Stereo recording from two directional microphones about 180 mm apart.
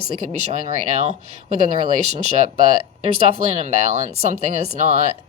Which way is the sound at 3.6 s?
40° right (ahead or behind).